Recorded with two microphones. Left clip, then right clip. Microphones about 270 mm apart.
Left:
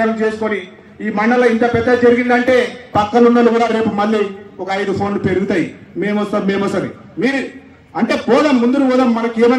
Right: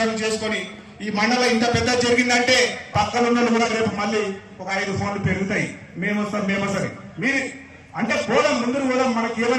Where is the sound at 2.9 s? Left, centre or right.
Left.